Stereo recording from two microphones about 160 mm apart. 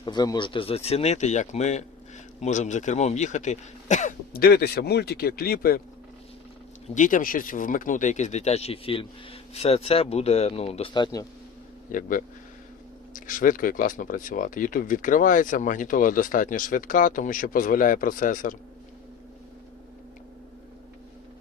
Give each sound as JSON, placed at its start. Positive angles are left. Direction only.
{"t": 0.0, "sound": "speech", "side_deg": 25}
{"t": 4.3, "sound": "speech", "side_deg": 75}
{"t": 6.8, "sound": "speech", "side_deg": 50}
{"t": 11.9, "sound": "speech", "side_deg": 55}